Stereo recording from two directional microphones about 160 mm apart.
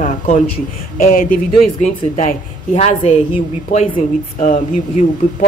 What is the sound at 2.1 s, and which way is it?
Speech, 45° left (ahead or behind).